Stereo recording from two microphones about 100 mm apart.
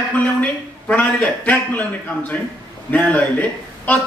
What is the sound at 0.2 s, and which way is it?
A man's voice, 15° left (ahead or behind).